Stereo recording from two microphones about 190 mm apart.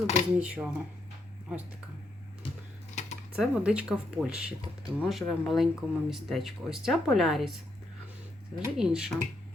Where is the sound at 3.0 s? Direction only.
40° left (ahead or behind).